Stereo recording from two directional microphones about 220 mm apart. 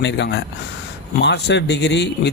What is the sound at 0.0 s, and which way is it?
Speech, 55° left (ahead or behind).